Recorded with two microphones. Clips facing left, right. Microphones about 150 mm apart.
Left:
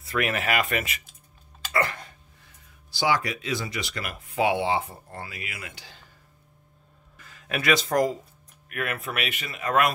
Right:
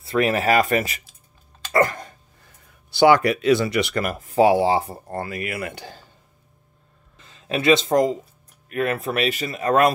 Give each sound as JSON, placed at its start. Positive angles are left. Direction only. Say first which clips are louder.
{"t": 0.0, "sound": "speech", "louder": "right 7 dB", "side_deg": -30}
{"t": 1.7, "sound": "throat clearing", "louder": "right 7 dB", "side_deg": -40}
{"t": 2.9, "sound": "speech", "louder": "right 10 dB", "side_deg": -60}
{"t": 4.0, "sound": "speech", "louder": "right 7 dB", "side_deg": -40}
{"t": 7.2, "sound": "speech", "louder": "right 6 dB", "side_deg": -25}